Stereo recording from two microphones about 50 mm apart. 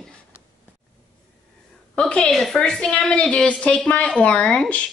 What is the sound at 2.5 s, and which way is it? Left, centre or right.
Speech, centre.